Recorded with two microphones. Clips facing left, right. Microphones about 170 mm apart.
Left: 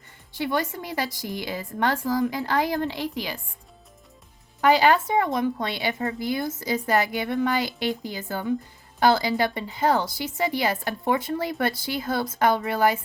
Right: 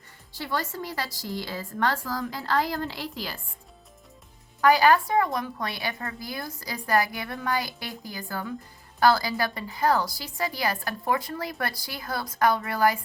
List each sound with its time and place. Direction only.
0.3 s a woman's voice: 20° left (ahead or behind)
4.6 s a woman's voice: 25° left (ahead or behind)